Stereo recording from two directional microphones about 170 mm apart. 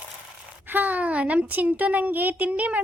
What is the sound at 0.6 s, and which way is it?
A woman's voice, 10° right (ahead or behind).